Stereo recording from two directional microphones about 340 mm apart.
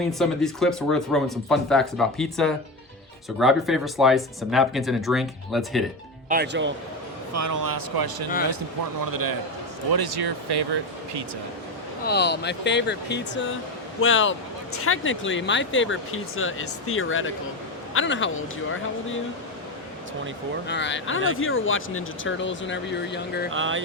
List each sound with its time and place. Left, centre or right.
0.1 s speech: centre
6.2 s speech: right
7.3 s speech: right
9.9 s speech: right
12.0 s speech: left
20.7 s speech: left
23.5 s a sound: right